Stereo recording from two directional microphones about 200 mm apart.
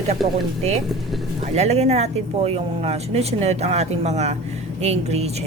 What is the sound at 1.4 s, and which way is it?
Speech, 35° right (ahead or behind).